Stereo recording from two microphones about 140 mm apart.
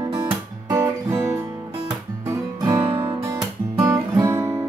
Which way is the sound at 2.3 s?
25° right (ahead or behind).